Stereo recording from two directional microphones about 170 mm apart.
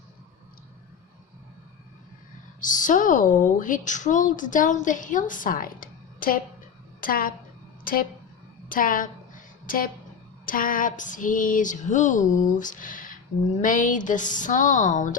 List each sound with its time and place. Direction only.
2.6 s a woman's voice: 50° left (ahead or behind)
8.7 s a sound: 55° left (ahead or behind)
10.4 s a woman's voice: 55° left (ahead or behind)